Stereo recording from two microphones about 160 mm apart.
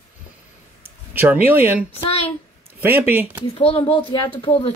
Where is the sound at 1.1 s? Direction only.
10° right (ahead or behind).